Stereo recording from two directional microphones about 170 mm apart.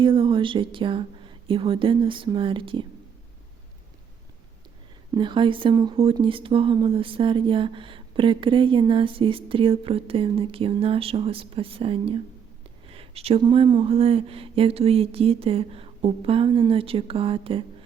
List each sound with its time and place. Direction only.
0.0 s speech: 30° right (ahead or behind)
5.1 s speech: 30° right (ahead or behind)